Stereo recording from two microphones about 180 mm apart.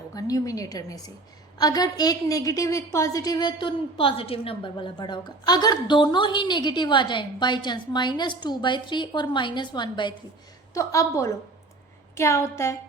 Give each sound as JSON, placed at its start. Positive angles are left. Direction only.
{"t": 0.1, "sound": "a woman's voice", "side_deg": 20}